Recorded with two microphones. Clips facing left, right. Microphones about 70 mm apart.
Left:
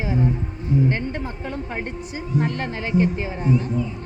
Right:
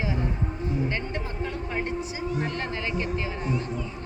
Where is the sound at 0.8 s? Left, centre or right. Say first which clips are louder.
Left 6 dB; left.